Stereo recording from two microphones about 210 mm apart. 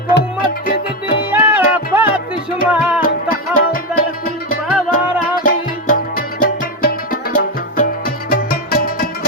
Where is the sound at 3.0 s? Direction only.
45° left (ahead or behind).